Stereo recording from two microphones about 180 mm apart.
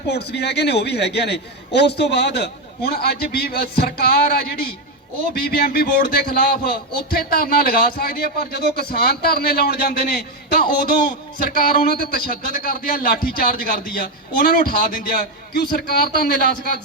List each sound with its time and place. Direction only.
0.1 s a man's voice: 70° left (ahead or behind)